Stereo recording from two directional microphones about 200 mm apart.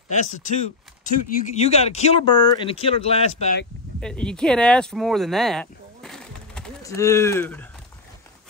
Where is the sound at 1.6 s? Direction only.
30° left (ahead or behind).